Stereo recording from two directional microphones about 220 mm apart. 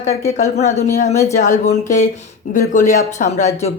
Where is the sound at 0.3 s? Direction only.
30° left (ahead or behind).